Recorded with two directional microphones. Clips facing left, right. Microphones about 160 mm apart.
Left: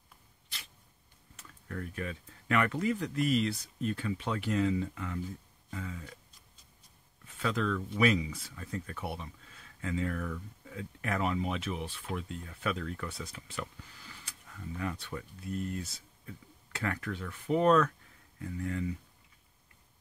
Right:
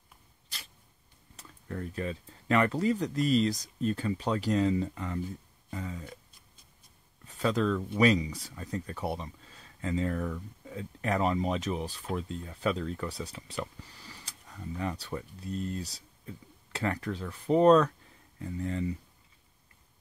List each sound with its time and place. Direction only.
1.3 s speech: 30° right (ahead or behind)
5.7 s a sound: 35° right (ahead or behind)
7.2 s speech: 35° right (ahead or behind)